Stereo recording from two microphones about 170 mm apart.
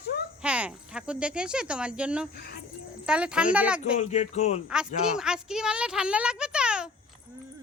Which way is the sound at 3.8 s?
45° left (ahead or behind).